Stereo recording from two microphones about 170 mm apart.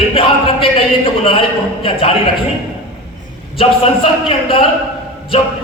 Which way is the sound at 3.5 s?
30° left (ahead or behind).